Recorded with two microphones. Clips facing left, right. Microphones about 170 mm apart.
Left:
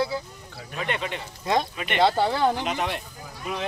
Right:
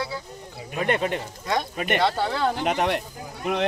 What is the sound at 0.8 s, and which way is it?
Speech, 45° right (ahead or behind).